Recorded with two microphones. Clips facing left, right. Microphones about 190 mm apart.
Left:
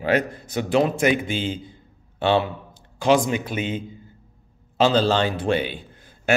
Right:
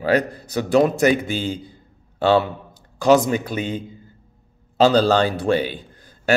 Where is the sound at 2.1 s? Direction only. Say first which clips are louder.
Right 3 dB; 40° right (ahead or behind).